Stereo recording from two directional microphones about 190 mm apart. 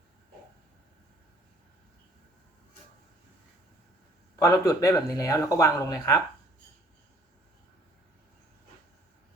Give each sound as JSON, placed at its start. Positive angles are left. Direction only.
{"t": 4.4, "sound": "speech", "side_deg": 20}